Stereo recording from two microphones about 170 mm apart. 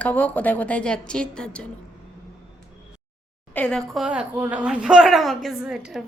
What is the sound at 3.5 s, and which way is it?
A woman's voice, 5° left (ahead or behind).